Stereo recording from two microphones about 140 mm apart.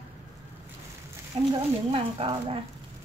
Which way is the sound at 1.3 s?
35° right (ahead or behind).